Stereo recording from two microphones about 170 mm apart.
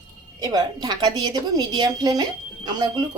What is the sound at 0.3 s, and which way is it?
A woman's voice, 25° right (ahead or behind).